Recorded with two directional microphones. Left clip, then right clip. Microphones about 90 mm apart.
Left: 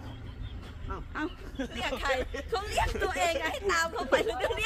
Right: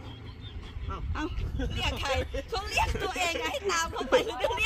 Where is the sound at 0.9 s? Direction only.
15° right (ahead or behind).